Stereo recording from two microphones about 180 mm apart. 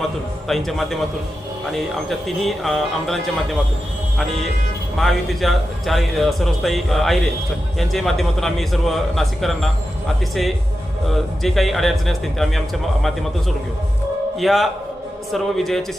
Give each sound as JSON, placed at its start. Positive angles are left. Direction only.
{"t": 0.4, "sound": "a man's voice", "side_deg": 0}
{"t": 4.9, "sound": "a man's voice", "side_deg": 0}
{"t": 11.1, "sound": "a man's voice", "side_deg": 0}
{"t": 14.3, "sound": "a man's voice", "side_deg": 0}